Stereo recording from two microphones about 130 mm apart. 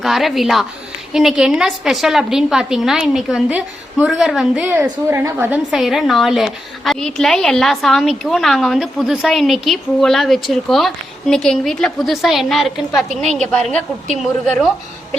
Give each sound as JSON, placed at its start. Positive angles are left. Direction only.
{"t": 0.0, "sound": "a woman's voice", "side_deg": 0}
{"t": 4.7, "sound": "a woman's voice", "side_deg": -20}
{"t": 5.7, "sound": "a woman's voice", "side_deg": 0}